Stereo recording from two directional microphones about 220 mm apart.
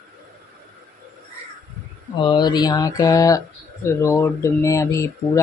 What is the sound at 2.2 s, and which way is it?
Speech, 20° left (ahead or behind).